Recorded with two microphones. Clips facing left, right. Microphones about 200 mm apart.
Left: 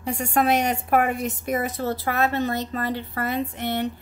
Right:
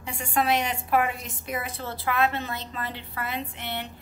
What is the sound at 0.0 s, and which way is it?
A woman's voice, 40° left (ahead or behind).